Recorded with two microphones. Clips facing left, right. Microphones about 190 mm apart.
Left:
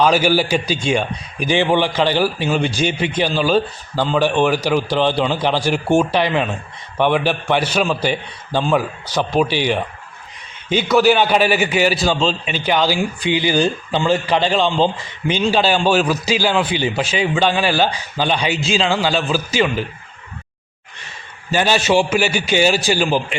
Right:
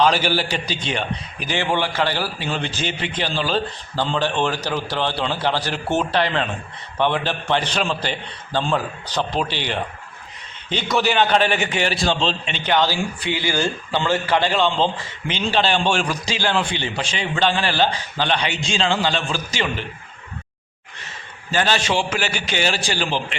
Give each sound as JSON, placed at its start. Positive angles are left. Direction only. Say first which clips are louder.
{"t": 0.0, "sound": "a man's voice", "louder": "left 4 dB", "side_deg": 10}
{"t": 21.5, "sound": "a man's voice", "louder": "left 5 dB", "side_deg": 10}